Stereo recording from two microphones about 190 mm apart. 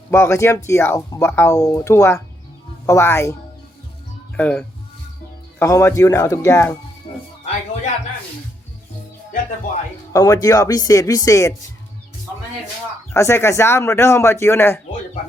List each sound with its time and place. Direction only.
0.1 s speech: 15° left (ahead or behind)
4.4 s speech: 5° left (ahead or behind)
7.1 s music: 40° left (ahead or behind)
10.1 s speech: 15° left (ahead or behind)
13.1 s speech: 15° left (ahead or behind)